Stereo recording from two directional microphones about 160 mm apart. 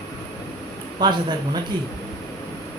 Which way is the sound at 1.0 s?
25° right (ahead or behind).